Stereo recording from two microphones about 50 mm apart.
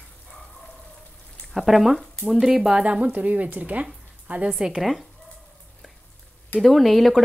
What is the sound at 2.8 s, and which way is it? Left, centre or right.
Speech, right.